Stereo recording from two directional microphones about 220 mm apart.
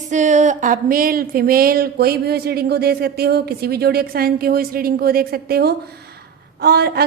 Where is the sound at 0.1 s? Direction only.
35° right (ahead or behind).